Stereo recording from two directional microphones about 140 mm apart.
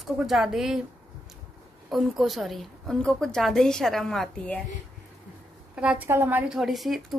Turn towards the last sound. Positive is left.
turn(degrees=0)  # may be behind; listen again after turning